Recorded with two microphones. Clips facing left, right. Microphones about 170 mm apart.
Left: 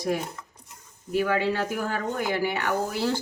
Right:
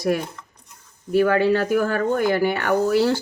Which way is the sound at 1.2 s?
70° right (ahead or behind).